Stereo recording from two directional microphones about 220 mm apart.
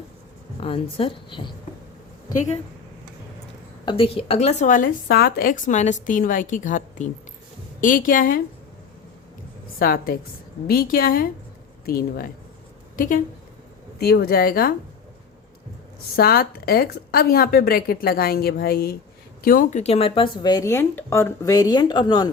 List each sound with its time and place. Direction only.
0.6 s speech: 25° left (ahead or behind)
3.8 s speech: 25° left (ahead or behind); by 8.4 s 40° left (ahead or behind)
9.7 s a woman's voice: 40° left (ahead or behind)
16.1 s a woman's voice: 45° left (ahead or behind); by 22.3 s 20° left (ahead or behind)